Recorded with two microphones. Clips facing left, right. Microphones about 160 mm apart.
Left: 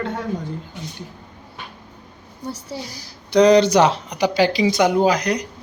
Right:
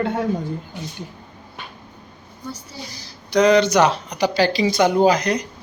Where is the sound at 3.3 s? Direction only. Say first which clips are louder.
Left 2 dB; 35° left (ahead or behind); by 5.4 s 10° left (ahead or behind).